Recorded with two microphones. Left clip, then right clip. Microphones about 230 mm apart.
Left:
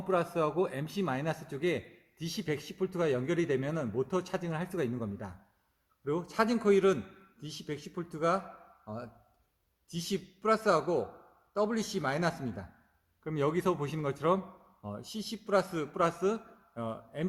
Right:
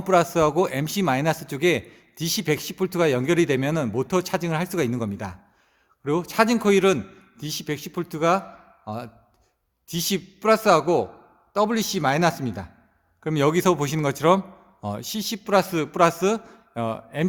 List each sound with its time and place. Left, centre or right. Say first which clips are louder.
0.0 s a man's voice: right 11 dB; right
9.9 s a man's voice: right 10 dB; right